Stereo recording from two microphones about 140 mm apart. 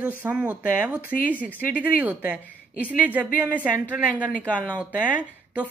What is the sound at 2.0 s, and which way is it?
Speech, 10° right (ahead or behind).